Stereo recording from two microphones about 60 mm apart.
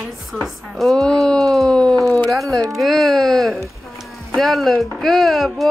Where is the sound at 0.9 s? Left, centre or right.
Centre.